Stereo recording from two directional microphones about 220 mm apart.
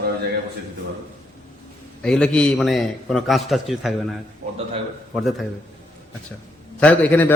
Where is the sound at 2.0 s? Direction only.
5° left (ahead or behind).